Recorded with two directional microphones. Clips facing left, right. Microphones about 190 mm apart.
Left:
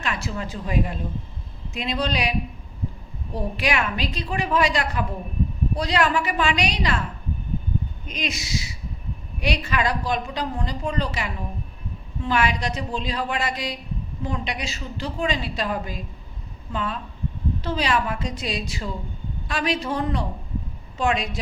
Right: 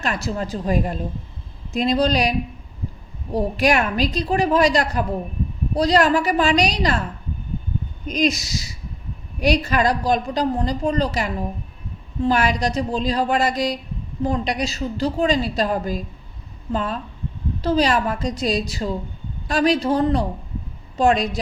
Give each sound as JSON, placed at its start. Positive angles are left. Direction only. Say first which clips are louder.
{"t": 0.0, "sound": "a woman's voice", "louder": "right 4 dB", "side_deg": -40}
{"t": 3.3, "sound": "a woman's voice", "louder": "right 6 dB", "side_deg": -40}
{"t": 8.0, "sound": "a woman's voice", "louder": "right 10 dB", "side_deg": -40}